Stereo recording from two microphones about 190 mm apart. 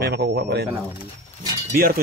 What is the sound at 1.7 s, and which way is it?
Speech, 50° right (ahead or behind).